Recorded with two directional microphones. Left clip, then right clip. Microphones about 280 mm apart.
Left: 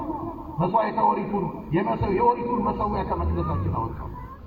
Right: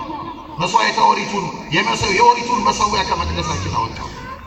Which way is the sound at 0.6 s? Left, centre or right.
Right.